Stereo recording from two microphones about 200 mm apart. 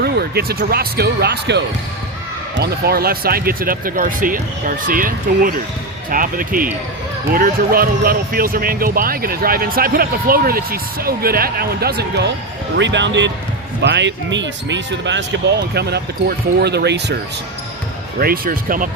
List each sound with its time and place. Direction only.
0.0 s speech: 50° right (ahead or behind)
18.2 s speech: 45° right (ahead or behind)